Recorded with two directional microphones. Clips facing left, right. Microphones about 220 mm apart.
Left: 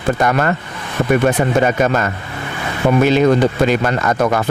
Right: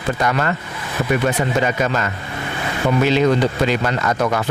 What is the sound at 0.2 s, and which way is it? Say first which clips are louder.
Speech: left 4 dB; 50° left (ahead or behind).